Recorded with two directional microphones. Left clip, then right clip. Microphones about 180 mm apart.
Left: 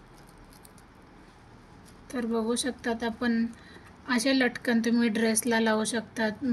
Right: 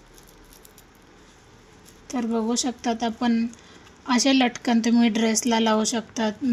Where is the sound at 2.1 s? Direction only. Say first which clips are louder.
Right 3 dB; 40° right (ahead or behind).